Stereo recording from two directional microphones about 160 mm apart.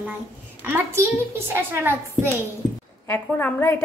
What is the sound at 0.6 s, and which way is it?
A woman's voice, 15° right (ahead or behind).